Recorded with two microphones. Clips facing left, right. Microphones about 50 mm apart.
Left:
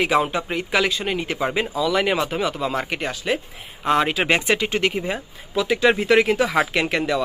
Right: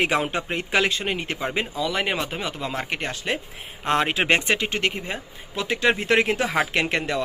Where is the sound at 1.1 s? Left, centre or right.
Right.